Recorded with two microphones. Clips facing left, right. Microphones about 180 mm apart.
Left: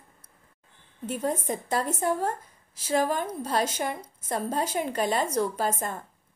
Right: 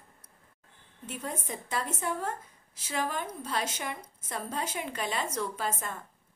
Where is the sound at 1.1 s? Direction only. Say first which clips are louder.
Left 9 dB; 40° left (ahead or behind).